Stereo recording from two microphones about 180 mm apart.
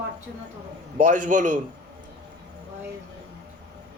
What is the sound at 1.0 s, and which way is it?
Speech, 45° right (ahead or behind).